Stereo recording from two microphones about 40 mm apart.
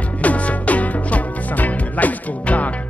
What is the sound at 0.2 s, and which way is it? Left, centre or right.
Music, left.